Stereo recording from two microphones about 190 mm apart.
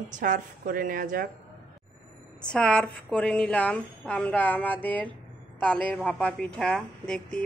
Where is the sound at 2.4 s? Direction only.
5° left (ahead or behind).